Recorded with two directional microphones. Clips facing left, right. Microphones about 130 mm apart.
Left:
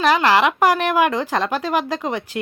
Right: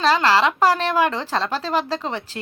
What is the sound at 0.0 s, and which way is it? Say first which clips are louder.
A woman's voice: left 2 dB; 15° left (ahead or behind).